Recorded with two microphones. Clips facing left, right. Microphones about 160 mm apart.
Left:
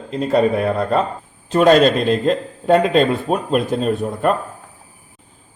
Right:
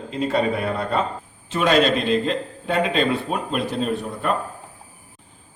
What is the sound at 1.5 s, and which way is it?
A man's voice, 45° left (ahead or behind).